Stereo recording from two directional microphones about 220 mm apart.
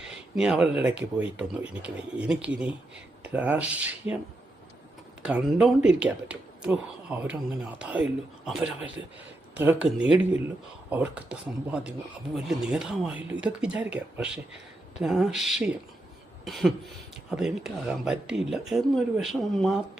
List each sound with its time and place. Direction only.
0.0 s speech: 5° right (ahead or behind)
5.2 s speech: 5° right (ahead or behind)